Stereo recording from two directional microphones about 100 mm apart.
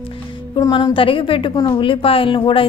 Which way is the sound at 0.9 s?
60° left (ahead or behind).